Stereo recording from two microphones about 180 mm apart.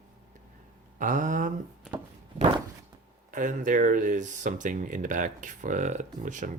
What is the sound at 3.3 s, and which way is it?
Speech, 45° right (ahead or behind).